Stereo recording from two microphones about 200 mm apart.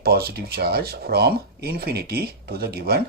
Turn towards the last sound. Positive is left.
turn(degrees=-50)  # may be behind; listen again after turning